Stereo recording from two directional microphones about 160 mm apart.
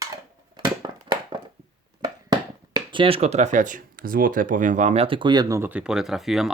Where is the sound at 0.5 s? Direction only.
30° right (ahead or behind).